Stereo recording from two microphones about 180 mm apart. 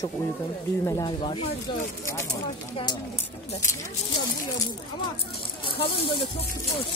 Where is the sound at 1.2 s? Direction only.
30° left (ahead or behind).